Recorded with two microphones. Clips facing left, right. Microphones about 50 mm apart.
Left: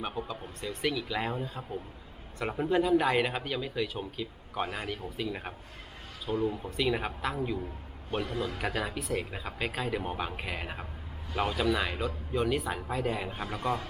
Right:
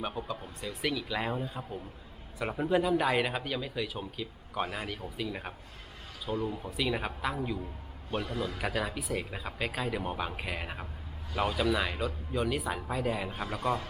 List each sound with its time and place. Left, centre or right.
0.0 s speech: centre
8.3 s a man's voice: left
8.5 s speech: centre